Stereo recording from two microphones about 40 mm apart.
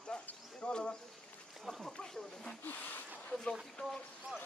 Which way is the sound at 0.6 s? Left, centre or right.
Left.